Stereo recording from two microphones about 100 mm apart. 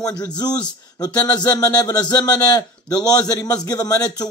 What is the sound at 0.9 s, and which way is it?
A man's voice, 40° left (ahead or behind).